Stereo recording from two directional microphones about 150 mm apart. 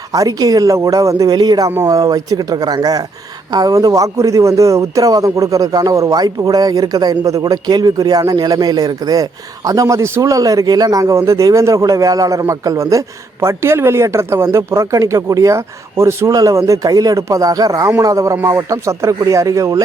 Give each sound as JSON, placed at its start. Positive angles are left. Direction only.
{"t": 0.1, "sound": "speech", "side_deg": -25}